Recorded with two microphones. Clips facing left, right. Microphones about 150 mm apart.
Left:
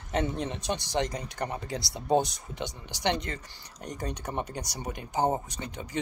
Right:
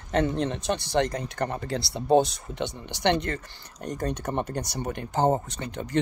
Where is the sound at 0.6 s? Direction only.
15° left (ahead or behind).